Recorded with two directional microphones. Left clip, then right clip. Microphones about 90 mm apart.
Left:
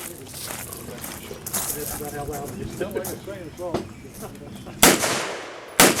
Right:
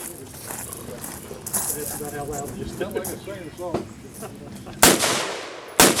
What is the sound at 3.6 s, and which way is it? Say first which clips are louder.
Speech: even; centre (ahead or behind).